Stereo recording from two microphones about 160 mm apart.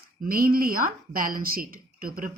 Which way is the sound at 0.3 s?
65° right (ahead or behind).